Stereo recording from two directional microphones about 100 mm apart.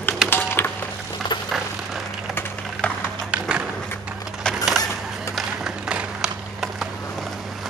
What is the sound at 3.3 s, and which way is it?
Horse, 10° right (ahead or behind).